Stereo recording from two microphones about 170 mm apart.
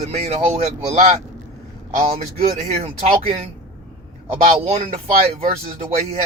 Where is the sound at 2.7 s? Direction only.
35° right (ahead or behind).